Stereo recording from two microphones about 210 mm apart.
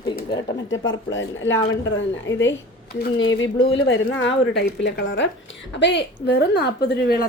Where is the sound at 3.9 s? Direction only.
60° left (ahead or behind).